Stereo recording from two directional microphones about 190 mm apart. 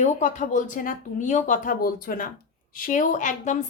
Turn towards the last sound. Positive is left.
turn(degrees=40)  # may be behind; listen again after turning